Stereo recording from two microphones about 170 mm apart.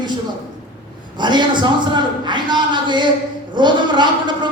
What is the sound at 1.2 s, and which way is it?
Speech, 25° right (ahead or behind).